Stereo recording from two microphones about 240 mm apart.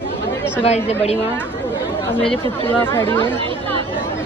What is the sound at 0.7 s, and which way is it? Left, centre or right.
Speech, left.